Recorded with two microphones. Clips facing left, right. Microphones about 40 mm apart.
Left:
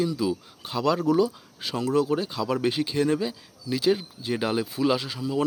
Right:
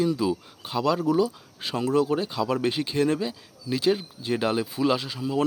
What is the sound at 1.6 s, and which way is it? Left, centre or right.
Speech, centre.